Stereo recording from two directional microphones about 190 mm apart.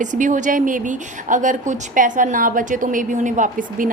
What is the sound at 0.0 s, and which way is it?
A woman's voice, 40° right (ahead or behind).